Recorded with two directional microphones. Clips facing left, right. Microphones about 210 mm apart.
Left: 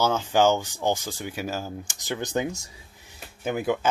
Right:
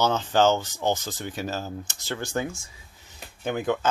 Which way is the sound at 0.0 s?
10° left (ahead or behind).